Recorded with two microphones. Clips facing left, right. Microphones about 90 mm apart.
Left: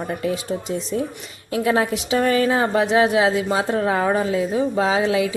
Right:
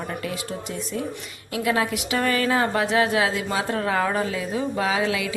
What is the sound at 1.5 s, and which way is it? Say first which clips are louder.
A woman's voice: left 4 dB; 30° left (ahead or behind).